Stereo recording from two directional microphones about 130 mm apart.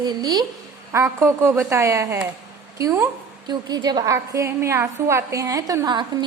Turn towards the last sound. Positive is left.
turn(degrees=-35)  # may be behind; listen again after turning